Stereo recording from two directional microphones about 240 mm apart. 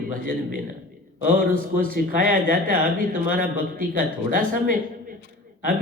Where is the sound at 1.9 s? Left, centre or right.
Right.